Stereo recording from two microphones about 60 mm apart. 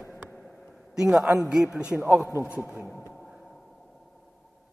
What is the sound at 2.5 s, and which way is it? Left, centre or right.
Speech, right.